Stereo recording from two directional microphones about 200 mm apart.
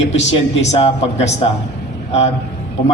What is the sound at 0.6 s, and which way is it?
Speech, 35° left (ahead or behind).